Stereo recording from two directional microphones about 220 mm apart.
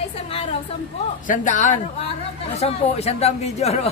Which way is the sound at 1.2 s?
35° left (ahead or behind).